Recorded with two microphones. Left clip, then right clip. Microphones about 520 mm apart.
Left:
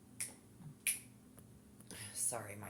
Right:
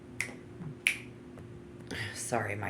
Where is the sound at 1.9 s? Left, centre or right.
Left.